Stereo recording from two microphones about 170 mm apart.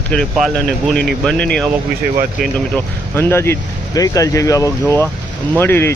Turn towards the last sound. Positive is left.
turn(degrees=15)  # may be behind; listen again after turning